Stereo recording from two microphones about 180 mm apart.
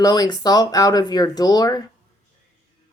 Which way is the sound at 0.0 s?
20° left (ahead or behind).